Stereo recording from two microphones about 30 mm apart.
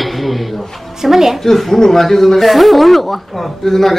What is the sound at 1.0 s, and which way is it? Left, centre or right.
Speech, centre.